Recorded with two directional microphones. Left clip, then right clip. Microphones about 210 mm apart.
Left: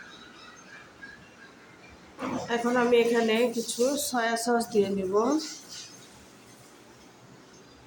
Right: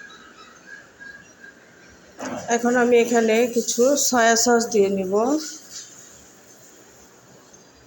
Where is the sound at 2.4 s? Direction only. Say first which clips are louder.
Right 7 dB; 20° right (ahead or behind).